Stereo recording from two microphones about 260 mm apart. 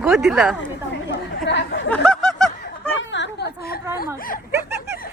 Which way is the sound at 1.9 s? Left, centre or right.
Centre.